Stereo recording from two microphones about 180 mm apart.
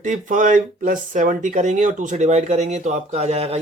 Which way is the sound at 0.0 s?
45° right (ahead or behind).